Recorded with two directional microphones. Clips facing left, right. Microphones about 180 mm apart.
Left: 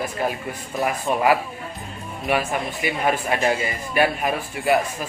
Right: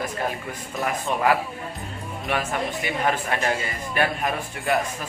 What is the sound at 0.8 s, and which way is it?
Speech, 15° left (ahead or behind).